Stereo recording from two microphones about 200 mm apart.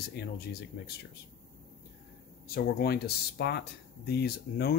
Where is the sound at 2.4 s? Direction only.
50° left (ahead or behind).